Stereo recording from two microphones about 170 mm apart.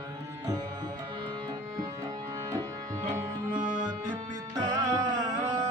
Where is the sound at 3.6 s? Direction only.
50° right (ahead or behind).